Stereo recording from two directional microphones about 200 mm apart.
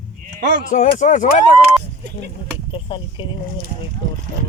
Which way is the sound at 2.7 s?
25° left (ahead or behind).